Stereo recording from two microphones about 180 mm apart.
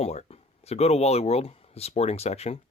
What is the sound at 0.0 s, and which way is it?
Speech, 35° left (ahead or behind).